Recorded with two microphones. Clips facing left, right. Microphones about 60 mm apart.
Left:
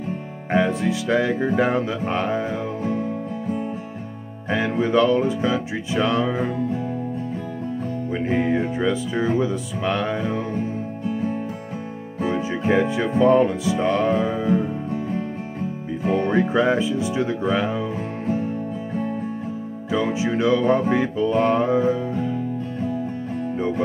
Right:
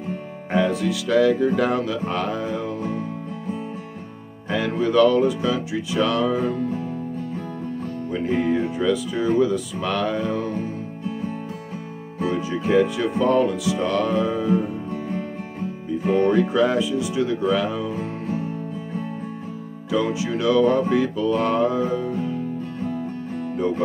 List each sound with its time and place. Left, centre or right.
0.5 s music: left
4.5 s music: left
8.1 s music: left
12.2 s music: left
19.9 s music: left